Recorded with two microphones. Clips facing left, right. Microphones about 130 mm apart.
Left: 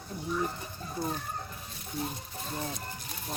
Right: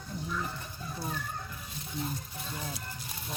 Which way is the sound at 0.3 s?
35° left (ahead or behind).